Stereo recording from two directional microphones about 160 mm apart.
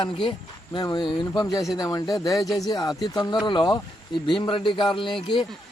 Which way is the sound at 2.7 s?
25° left (ahead or behind).